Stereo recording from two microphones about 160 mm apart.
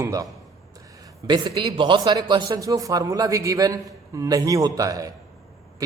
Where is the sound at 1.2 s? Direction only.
30° right (ahead or behind).